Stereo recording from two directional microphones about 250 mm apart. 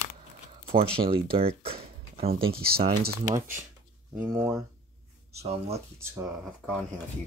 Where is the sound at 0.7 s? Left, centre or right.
Right.